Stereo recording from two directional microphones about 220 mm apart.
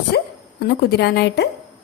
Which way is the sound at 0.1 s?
50° left (ahead or behind).